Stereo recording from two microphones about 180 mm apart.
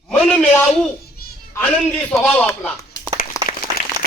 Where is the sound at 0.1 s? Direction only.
5° left (ahead or behind).